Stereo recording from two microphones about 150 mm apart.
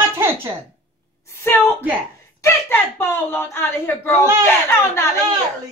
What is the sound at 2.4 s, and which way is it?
Speech, 15° left (ahead or behind).